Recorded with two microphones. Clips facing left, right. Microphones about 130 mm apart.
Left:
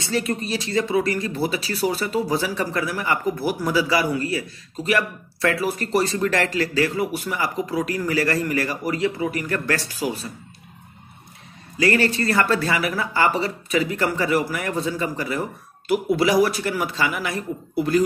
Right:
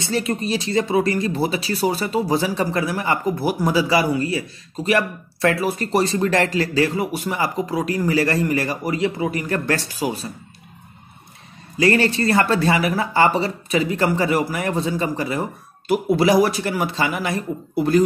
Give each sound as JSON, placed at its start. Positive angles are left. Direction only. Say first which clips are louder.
{"t": 0.0, "sound": "speech", "louder": "right 2 dB", "side_deg": -25}
{"t": 11.8, "sound": "speech", "louder": "right 2 dB", "side_deg": -25}